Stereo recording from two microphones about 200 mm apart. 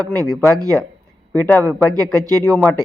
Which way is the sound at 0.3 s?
5° left (ahead or behind).